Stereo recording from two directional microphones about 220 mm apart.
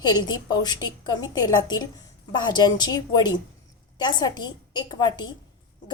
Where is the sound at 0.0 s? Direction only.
20° left (ahead or behind).